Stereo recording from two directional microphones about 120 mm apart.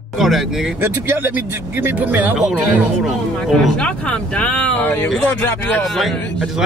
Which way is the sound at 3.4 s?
5° left (ahead or behind).